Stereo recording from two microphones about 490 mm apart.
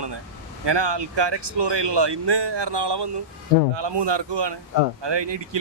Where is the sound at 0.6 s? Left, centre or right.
Right.